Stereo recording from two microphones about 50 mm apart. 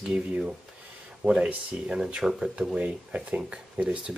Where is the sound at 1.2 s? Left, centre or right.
Centre.